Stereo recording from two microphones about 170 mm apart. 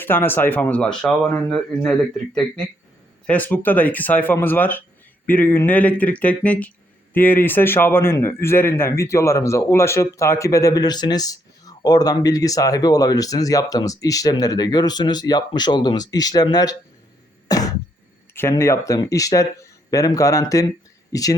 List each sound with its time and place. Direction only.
0.0 s speech: 10° left (ahead or behind)
3.2 s speech: 10° left (ahead or behind)
17.5 s throat clearing: 20° left (ahead or behind)
18.3 s speech: 15° left (ahead or behind)